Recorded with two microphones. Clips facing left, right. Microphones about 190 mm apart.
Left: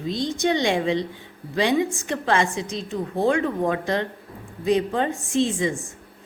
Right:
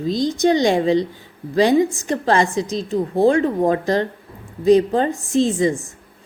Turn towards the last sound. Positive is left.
turn(degrees=-40)  # may be behind; listen again after turning